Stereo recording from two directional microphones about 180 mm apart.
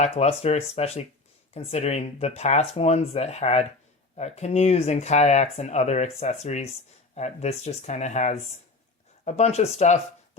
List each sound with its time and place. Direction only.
0.0 s speech: 35° left (ahead or behind)